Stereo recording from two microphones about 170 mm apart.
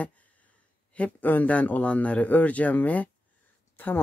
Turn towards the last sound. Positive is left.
turn(degrees=10)  # may be behind; listen again after turning